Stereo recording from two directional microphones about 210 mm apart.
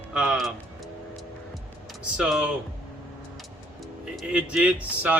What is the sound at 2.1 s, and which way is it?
Speech, 5° right (ahead or behind).